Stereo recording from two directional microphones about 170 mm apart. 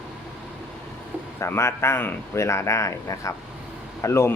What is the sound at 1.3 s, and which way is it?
Speech, 15° left (ahead or behind).